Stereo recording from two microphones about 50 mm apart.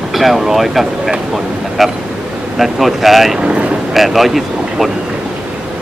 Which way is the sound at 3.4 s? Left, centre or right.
Right.